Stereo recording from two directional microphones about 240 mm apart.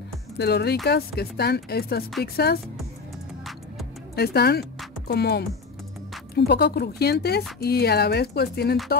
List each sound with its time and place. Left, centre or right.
0.4 s speech: left
4.1 s speech: left